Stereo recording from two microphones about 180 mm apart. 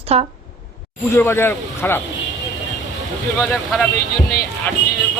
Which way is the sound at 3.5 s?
5° left (ahead or behind).